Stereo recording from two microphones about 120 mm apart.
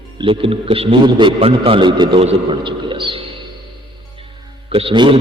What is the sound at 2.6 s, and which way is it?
Speech, 40° right (ahead or behind).